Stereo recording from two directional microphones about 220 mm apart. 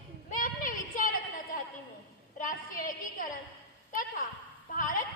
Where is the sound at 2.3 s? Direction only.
35° left (ahead or behind).